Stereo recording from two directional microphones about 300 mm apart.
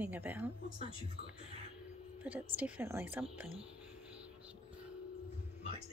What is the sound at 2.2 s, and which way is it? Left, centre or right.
Speech, centre.